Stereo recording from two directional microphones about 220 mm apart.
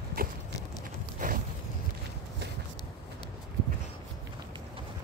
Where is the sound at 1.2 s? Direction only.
35° right (ahead or behind).